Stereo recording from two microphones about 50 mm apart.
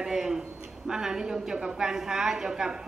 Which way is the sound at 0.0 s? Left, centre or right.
Centre.